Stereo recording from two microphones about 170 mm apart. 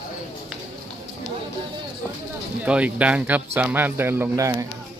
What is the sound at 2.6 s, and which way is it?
Speech, 10° right (ahead or behind).